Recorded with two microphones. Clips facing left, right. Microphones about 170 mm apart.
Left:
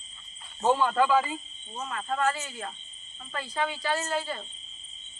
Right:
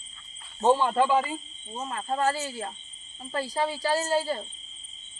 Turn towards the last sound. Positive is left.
turn(degrees=-35)  # may be behind; listen again after turning